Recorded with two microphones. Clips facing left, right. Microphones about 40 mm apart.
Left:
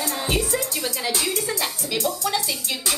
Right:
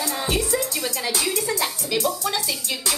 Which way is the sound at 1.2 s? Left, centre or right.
Centre.